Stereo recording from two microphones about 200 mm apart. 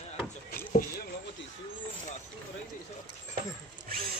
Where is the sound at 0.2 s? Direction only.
10° left (ahead or behind).